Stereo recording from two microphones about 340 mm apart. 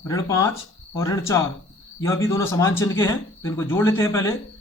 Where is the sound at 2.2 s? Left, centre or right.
Centre.